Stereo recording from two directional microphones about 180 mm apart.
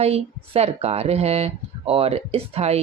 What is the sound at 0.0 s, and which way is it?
Speech, 35° right (ahead or behind).